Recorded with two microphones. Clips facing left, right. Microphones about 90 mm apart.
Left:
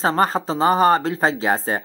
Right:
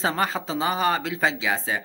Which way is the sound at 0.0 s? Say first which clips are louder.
Left 6 dB; 40° left (ahead or behind).